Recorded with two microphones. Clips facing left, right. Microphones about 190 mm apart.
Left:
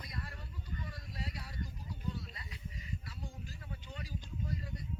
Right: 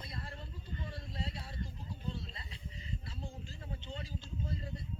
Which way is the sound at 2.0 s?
25° right (ahead or behind).